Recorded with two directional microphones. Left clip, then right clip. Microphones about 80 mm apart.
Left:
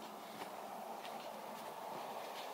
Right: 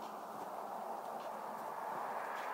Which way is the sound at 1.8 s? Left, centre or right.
Centre.